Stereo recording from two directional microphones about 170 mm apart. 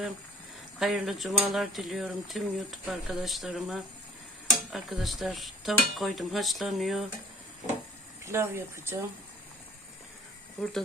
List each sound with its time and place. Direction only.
0.8 s speech: centre (ahead or behind)
8.2 s speech: 15° right (ahead or behind)
10.6 s speech: centre (ahead or behind)